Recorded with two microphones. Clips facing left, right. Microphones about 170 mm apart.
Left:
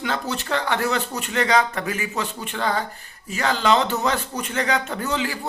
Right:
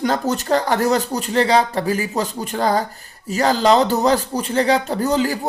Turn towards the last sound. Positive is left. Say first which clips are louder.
# right 7 dB
turn(degrees=-40)  # may be behind; listen again after turning